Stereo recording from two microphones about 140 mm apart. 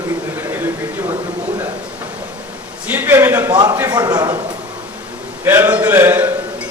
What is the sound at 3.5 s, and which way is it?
Speech, 30° right (ahead or behind).